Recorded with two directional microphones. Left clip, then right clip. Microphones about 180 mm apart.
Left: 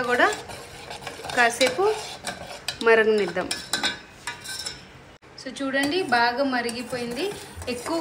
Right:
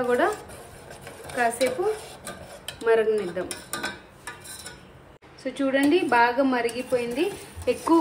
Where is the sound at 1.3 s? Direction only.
5° left (ahead or behind).